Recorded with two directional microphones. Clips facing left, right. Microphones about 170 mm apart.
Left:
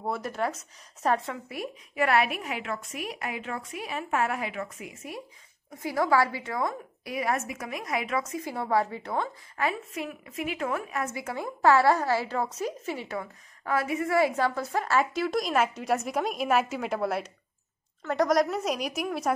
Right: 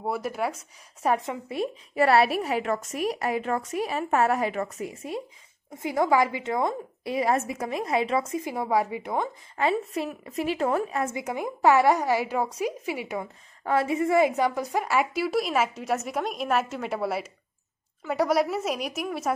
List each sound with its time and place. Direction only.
0.0 s a woman's voice: 10° right (ahead or behind); by 11.1 s 30° right (ahead or behind)
11.1 s a woman's voice: 15° right (ahead or behind)
13.7 s a woman's voice: 25° right (ahead or behind); by 19.3 s centre (ahead or behind)